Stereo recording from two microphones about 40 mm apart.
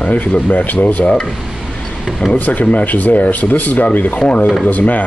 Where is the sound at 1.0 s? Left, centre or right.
Left.